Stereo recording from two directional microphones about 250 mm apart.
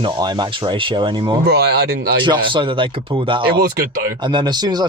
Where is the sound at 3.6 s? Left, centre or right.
Right.